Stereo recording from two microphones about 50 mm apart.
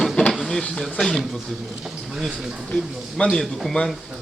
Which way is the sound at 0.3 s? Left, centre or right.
Centre.